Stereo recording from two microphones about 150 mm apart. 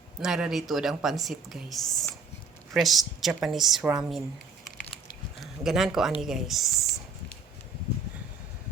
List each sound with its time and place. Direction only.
0.2 s speech: 5° right (ahead or behind)
5.4 s speech: centre (ahead or behind)